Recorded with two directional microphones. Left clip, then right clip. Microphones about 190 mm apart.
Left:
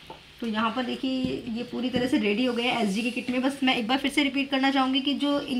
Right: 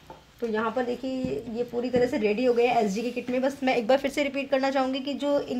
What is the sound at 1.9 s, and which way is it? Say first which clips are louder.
A woman's voice: right 1 dB; 50° right (ahead or behind).